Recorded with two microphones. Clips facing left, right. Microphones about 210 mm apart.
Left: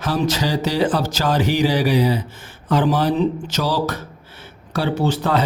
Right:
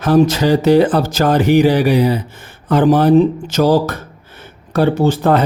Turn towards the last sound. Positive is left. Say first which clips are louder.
# right 6 dB
turn(degrees=-50)  # may be behind; listen again after turning